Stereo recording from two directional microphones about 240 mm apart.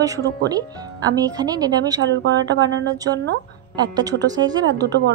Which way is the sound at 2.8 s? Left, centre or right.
Centre.